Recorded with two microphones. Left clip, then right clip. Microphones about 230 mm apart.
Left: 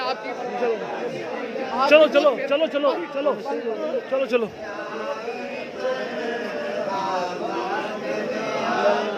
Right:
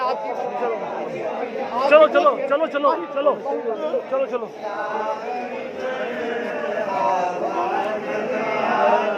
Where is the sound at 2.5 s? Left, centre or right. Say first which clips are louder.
Right 2 dB; left.